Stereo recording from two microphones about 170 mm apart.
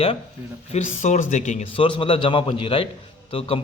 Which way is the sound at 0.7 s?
45° left (ahead or behind).